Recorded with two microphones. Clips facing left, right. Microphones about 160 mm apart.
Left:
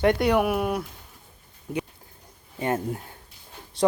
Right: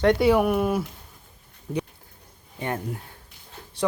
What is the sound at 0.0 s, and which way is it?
Speech, centre (ahead or behind).